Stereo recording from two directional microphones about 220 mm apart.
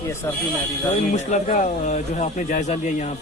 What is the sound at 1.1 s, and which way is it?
Speech, 35° left (ahead or behind).